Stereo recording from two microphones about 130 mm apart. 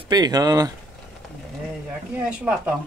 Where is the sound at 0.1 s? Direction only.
30° right (ahead or behind).